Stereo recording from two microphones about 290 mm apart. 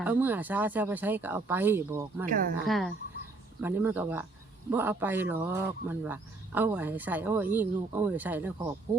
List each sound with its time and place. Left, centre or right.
0.0 s speech: centre
2.2 s speech: right
2.6 s speech: centre